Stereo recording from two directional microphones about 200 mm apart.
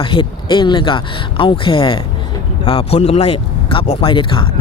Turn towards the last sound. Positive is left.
turn(degrees=25)  # may be behind; listen again after turning